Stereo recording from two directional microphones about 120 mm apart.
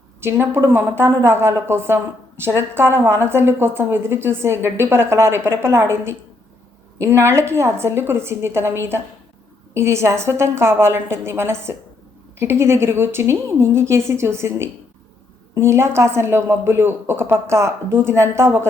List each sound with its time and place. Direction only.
0.2 s a woman's voice: 20° right (ahead or behind)